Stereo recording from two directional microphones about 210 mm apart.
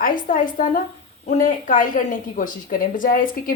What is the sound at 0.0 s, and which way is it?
A woman's voice, 40° left (ahead or behind).